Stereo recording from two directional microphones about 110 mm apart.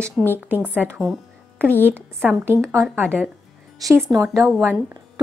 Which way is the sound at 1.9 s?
20° right (ahead or behind).